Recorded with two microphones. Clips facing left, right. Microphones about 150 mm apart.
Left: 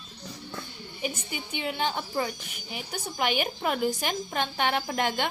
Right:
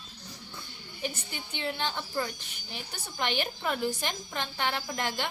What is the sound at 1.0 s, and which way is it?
Speech, 15° left (ahead or behind).